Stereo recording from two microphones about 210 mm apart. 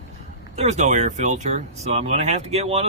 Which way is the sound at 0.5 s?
30° right (ahead or behind).